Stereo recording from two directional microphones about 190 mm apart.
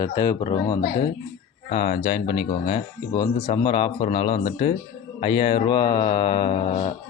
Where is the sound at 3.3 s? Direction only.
35° left (ahead or behind).